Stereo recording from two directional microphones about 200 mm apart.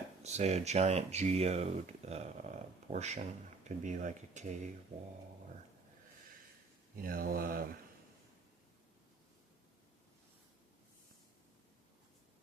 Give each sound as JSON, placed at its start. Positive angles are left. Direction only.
{"t": 0.2, "sound": "speech", "side_deg": -35}
{"t": 6.9, "sound": "mantra", "side_deg": -45}